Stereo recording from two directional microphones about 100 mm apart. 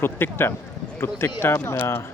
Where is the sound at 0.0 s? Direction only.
25° left (ahead or behind).